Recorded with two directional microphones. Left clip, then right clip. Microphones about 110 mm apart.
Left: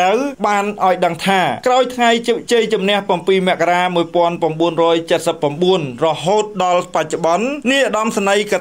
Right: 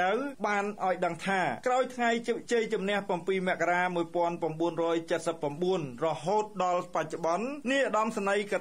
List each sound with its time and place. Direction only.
0.0 s speech: 25° left (ahead or behind)
6.6 s speech: 40° left (ahead or behind)